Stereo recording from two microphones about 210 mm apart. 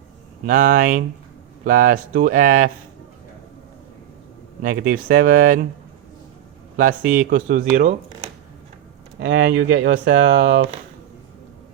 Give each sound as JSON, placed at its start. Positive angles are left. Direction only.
{"t": 0.4, "sound": "speech", "side_deg": -40}
{"t": 4.6, "sound": "speech", "side_deg": -45}
{"t": 7.1, "sound": "speech", "side_deg": -40}
{"t": 9.1, "sound": "speech", "side_deg": -45}